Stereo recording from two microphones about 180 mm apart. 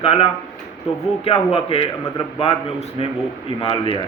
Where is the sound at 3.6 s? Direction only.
30° left (ahead or behind).